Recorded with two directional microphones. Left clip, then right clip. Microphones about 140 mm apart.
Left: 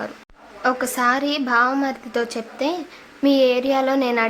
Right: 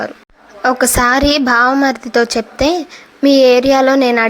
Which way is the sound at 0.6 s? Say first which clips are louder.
Right 7 dB; 55° right (ahead or behind).